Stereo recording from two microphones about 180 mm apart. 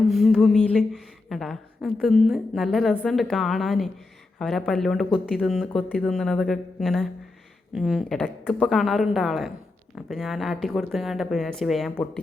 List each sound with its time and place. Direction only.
0.0 s speech: centre (ahead or behind)